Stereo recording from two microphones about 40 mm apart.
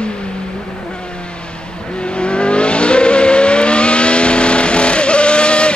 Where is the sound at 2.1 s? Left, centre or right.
Left.